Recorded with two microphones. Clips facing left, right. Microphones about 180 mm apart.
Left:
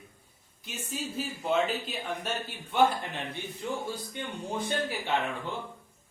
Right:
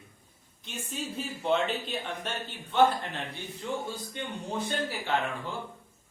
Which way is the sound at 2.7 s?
10° left (ahead or behind).